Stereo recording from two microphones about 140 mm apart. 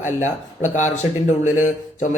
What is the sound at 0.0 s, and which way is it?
Speech, 60° left (ahead or behind).